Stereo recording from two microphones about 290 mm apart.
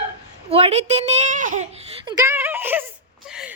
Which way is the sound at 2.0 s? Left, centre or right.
Centre.